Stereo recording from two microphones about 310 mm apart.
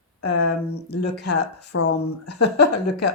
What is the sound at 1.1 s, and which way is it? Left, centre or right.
Speech, left.